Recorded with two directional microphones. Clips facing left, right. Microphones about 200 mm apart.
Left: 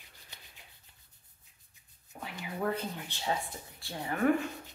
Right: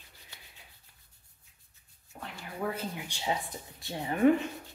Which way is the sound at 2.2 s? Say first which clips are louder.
Left 1 dB; 5° left (ahead or behind).